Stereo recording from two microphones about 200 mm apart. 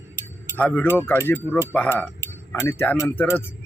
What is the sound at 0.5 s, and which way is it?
Speech, 5° left (ahead or behind).